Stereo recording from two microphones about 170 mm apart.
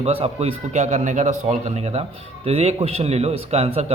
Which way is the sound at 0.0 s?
35° right (ahead or behind).